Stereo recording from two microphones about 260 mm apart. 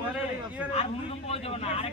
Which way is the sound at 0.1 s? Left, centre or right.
Centre.